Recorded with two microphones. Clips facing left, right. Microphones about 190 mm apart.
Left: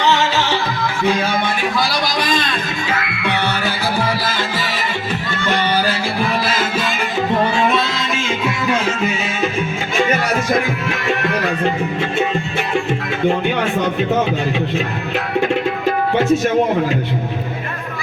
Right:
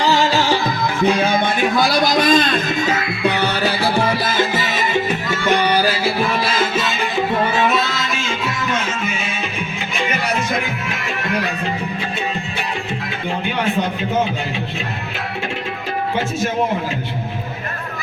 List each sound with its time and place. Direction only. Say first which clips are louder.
0.0 s music: right 1 dB; 35° right (ahead or behind)
1.0 s music: right 2 dB; 20° right (ahead or behind)
1.7 s a man's voice: right 4 dB; 45° right (ahead or behind)
4.2 s music: right 3 dB; 20° right (ahead or behind)